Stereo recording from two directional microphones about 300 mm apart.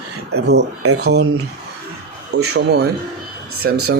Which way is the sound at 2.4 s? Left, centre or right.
Right.